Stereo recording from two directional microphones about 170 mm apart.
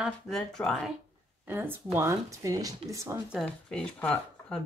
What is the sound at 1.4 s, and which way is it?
Speech, 15° right (ahead or behind).